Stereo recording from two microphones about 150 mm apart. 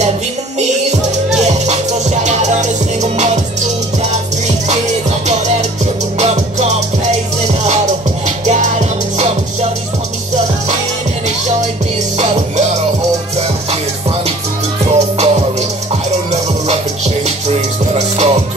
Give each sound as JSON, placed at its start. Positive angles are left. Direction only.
{"t": 1.3, "sound": "music", "side_deg": -50}
{"t": 6.1, "sound": "music", "side_deg": -50}
{"t": 8.5, "sound": "music", "side_deg": -50}
{"t": 14.9, "sound": "music", "side_deg": -45}